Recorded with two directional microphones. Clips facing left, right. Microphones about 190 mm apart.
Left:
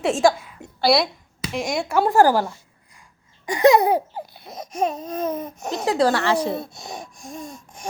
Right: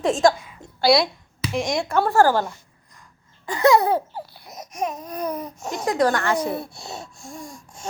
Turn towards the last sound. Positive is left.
turn(degrees=20)  # may be behind; listen again after turning